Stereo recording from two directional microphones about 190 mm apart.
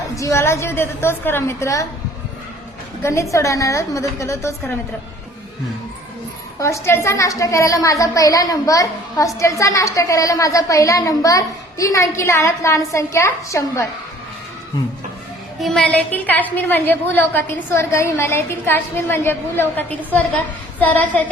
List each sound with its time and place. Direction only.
0.2 s a woman's voice: 15° left (ahead or behind)
3.0 s a woman's voice: 15° left (ahead or behind)
6.6 s a woman's voice: 15° left (ahead or behind)
15.6 s a woman's voice: 5° left (ahead or behind)